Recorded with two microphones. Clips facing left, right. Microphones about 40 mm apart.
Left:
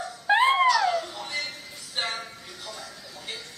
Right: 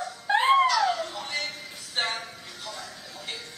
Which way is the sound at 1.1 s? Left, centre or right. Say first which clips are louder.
Even; centre.